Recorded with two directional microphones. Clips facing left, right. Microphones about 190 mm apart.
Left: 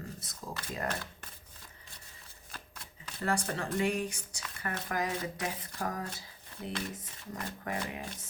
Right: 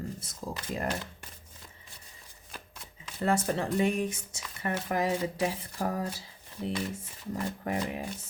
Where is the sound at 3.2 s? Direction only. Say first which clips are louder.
Right 5 dB; 20° right (ahead or behind).